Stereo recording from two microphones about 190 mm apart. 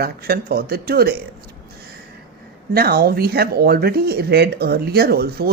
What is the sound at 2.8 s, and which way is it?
Speech, 55° right (ahead or behind).